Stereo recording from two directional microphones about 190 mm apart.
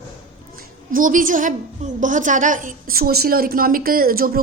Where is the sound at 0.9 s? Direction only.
45° right (ahead or behind).